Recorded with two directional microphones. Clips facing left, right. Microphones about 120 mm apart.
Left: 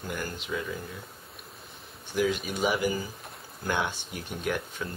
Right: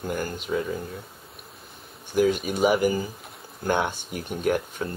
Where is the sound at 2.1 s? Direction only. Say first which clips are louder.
Right 6 dB; 50° right (ahead or behind).